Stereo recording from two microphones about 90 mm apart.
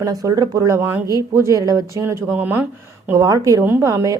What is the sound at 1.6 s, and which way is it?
Speech, 40° right (ahead or behind).